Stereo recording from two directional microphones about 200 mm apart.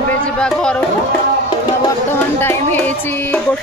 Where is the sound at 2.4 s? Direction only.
10° left (ahead or behind).